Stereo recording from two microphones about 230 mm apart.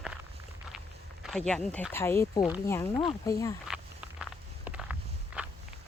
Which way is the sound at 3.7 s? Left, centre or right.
Centre.